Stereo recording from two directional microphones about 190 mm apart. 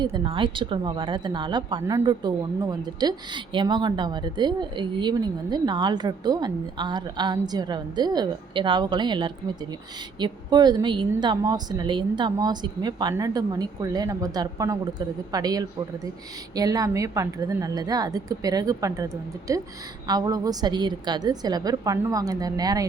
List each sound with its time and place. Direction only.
0.0 s a woman's voice: 25° right (ahead or behind)